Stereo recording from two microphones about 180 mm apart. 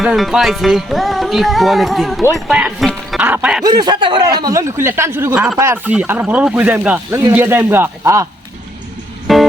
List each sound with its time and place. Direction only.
0.0 s speech: 5° right (ahead or behind)
3.6 s speech: 20° right (ahead or behind)
9.2 s music: centre (ahead or behind)